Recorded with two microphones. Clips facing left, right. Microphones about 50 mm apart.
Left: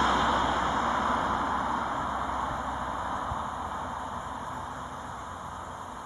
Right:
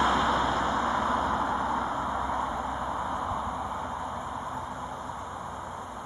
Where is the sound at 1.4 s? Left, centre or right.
Centre.